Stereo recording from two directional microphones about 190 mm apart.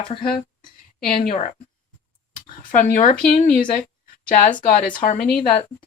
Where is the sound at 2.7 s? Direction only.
45° left (ahead or behind).